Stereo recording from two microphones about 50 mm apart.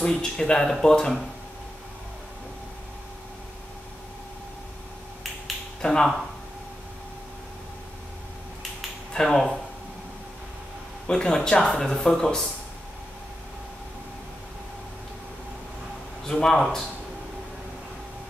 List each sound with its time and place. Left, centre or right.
0.0 s speech: centre
5.8 s speech: centre
9.1 s speech: centre
11.1 s speech: centre
16.3 s speech: centre